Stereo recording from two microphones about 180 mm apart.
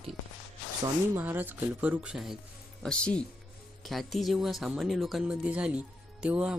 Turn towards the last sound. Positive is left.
turn(degrees=-5)  # may be behind; listen again after turning